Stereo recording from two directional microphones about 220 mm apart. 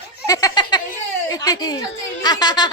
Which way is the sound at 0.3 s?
15° left (ahead or behind).